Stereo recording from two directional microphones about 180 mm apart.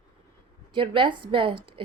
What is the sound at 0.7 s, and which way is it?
A woman's voice, 30° right (ahead or behind).